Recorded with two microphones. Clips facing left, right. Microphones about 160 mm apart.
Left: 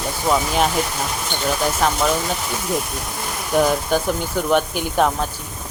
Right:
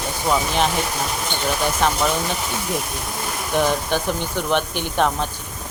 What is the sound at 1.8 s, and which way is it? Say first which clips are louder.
Speech: even; centre (ahead or behind).